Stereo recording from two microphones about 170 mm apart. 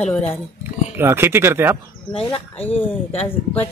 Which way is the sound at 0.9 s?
15° right (ahead or behind).